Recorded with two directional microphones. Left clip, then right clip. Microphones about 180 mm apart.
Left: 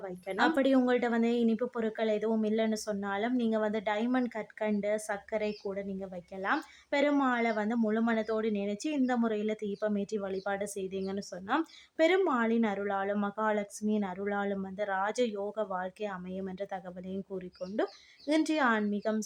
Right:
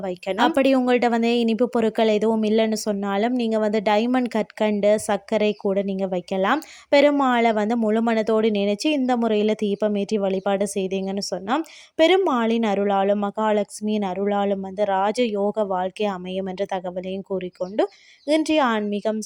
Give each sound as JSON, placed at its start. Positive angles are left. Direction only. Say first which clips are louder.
{"t": 0.0, "sound": "speech", "louder": "right 9 dB", "side_deg": -40}